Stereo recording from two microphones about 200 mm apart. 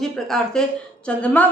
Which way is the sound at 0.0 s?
Centre (ahead or behind).